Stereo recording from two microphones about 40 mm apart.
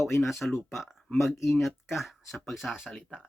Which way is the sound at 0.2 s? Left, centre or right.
Centre.